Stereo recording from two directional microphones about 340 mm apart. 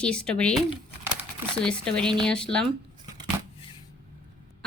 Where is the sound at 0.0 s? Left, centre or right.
Centre.